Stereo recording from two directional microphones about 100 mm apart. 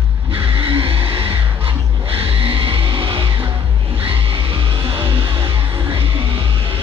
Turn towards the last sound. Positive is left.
turn(degrees=-65)  # may be behind; listen again after turning